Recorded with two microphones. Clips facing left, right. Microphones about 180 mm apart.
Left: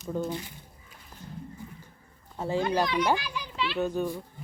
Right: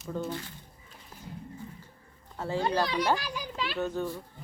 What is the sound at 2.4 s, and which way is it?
Speech, 15° left (ahead or behind).